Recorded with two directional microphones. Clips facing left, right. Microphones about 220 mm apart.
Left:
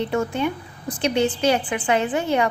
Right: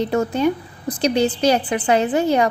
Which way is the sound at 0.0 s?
40° right (ahead or behind).